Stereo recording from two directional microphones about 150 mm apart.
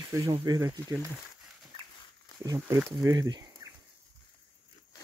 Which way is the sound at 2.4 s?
20° right (ahead or behind).